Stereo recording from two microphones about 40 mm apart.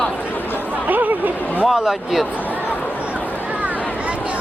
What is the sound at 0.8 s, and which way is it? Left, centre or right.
Chatter, right.